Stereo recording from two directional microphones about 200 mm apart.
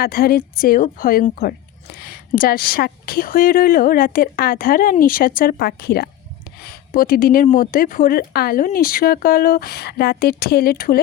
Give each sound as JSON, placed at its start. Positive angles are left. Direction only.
{"t": 0.0, "sound": "a woman's voice", "side_deg": 50}